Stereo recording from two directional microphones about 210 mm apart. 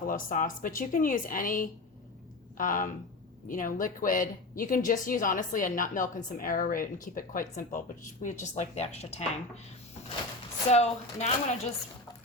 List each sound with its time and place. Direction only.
0.1 s a woman's voice: 40° left (ahead or behind)
10.7 s a woman's voice: 30° left (ahead or behind)